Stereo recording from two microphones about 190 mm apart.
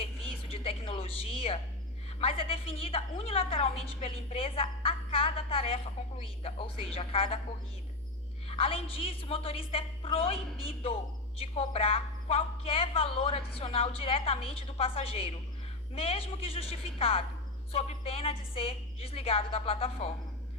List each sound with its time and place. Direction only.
0.0 s a sound: 30° left (ahead or behind)
2.2 s a woman's voice: 30° left (ahead or behind)
8.4 s a woman's voice: 30° left (ahead or behind)